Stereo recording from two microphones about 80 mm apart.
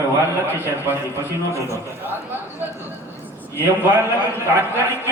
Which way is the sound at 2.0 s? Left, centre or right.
Right.